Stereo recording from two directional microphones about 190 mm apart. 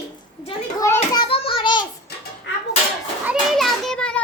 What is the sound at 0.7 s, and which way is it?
Speech, 15° left (ahead or behind).